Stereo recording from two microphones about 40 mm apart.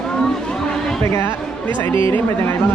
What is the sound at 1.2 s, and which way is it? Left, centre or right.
Speech, left.